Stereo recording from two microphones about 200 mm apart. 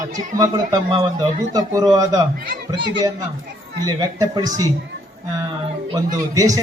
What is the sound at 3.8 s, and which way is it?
Speech, 20° right (ahead or behind).